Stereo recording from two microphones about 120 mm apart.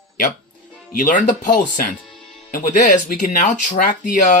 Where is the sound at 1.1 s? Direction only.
90° left.